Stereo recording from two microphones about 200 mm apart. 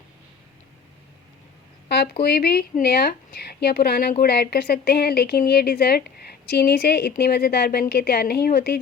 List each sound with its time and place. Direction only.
1.9 s a woman's voice: 55° left (ahead or behind)